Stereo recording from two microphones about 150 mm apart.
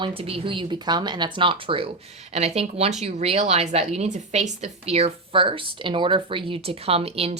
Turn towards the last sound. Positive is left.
turn(degrees=-40)  # may be behind; listen again after turning